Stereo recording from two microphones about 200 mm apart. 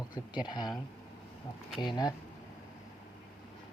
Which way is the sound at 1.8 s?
20° left (ahead or behind).